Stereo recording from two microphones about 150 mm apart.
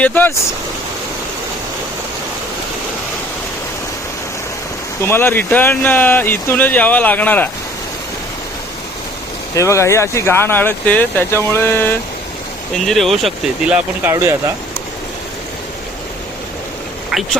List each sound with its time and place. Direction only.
0.0 s speech: 15° left (ahead or behind)
5.0 s speech: 15° left (ahead or behind)
9.6 s speech: 20° left (ahead or behind)
12.8 s speech: centre (ahead or behind); by 14.5 s 20° right (ahead or behind)